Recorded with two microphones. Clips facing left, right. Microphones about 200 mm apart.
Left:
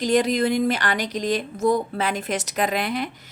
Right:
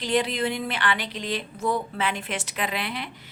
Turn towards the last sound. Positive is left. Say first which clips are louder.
# left 6 dB
turn(degrees=45)  # may be behind; listen again after turning